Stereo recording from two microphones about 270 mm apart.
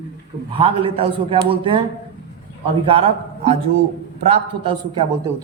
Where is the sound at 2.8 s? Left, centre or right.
Right.